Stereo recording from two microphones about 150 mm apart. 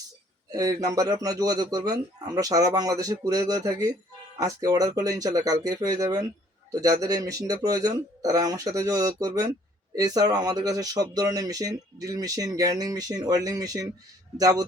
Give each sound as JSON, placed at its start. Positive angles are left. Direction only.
{"t": 0.5, "sound": "speech", "side_deg": -25}